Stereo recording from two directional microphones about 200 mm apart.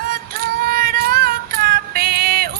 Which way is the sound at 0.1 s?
50° right (ahead or behind).